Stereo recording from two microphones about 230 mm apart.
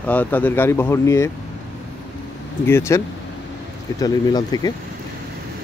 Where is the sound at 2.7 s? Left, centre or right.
Centre.